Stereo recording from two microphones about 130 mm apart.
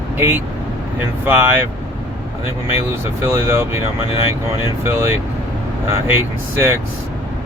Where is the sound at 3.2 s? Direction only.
20° right (ahead or behind).